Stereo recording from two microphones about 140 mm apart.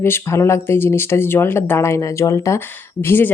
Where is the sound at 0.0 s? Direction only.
20° left (ahead or behind).